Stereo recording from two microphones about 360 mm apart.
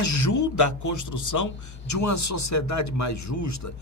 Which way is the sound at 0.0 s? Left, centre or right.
Left.